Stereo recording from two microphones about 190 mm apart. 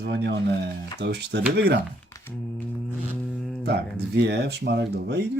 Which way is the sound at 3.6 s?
60° right (ahead or behind).